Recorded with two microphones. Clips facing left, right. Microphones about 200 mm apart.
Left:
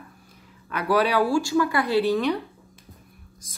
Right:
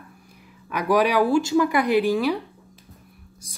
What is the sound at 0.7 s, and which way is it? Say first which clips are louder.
Speech: right 2 dB; 15° right (ahead or behind).